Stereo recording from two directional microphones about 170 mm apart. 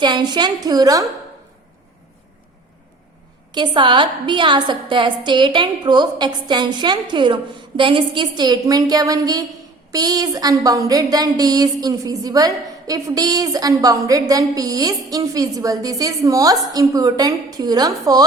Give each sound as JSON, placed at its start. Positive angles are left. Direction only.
{"t": 0.0, "sound": "a woman's voice", "side_deg": -25}
{"t": 3.5, "sound": "a woman's voice", "side_deg": -25}